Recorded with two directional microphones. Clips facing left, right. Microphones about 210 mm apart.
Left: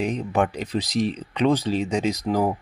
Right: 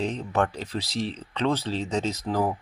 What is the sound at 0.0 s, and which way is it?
Speech, 15° left (ahead or behind).